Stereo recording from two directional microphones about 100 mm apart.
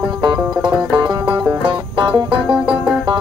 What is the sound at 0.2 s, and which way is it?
Music, 50° right (ahead or behind).